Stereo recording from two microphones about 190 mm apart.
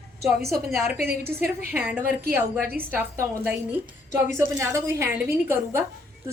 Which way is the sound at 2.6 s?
50° right (ahead or behind).